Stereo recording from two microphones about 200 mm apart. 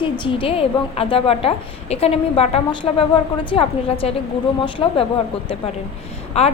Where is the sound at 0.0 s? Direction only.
25° left (ahead or behind).